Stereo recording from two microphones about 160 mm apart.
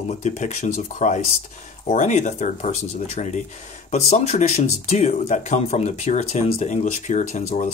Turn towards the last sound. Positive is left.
turn(degrees=50)  # may be behind; listen again after turning